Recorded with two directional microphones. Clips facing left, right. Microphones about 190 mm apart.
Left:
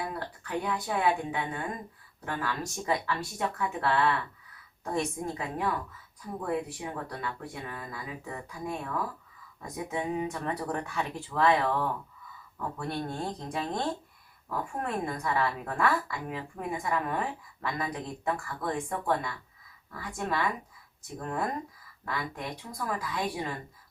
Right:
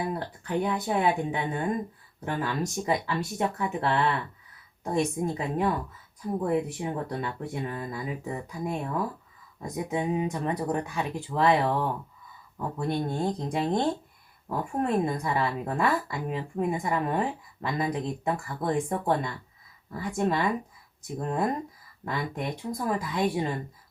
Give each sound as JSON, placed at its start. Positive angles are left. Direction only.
{"t": 0.1, "sound": "a woman's voice", "side_deg": -25}